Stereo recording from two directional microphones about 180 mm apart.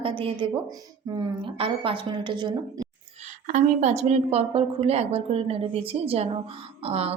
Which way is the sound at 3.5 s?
40° right (ahead or behind).